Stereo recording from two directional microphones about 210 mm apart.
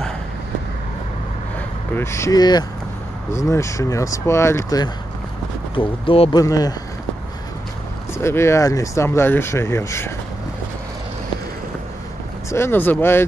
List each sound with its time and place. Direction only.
2.0 s speech: 15° left (ahead or behind)
8.1 s speech: 10° left (ahead or behind)
12.4 s speech: 10° left (ahead or behind)